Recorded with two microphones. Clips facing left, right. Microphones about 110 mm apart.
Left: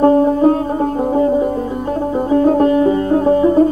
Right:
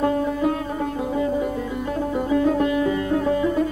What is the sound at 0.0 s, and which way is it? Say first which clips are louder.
Music: left 10 dB; 35° left (ahead or behind).